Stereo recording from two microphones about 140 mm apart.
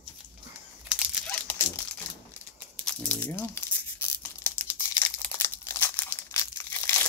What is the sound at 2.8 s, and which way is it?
Crumpling, 5° left (ahead or behind).